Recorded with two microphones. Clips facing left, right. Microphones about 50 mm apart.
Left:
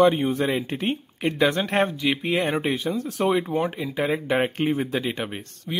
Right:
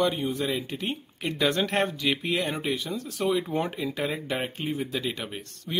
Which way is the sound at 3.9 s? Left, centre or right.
Left.